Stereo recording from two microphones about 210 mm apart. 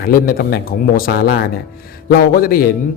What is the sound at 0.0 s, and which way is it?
Speech, 45° left (ahead or behind).